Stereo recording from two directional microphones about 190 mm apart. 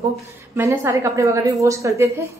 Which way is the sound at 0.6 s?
15° right (ahead or behind).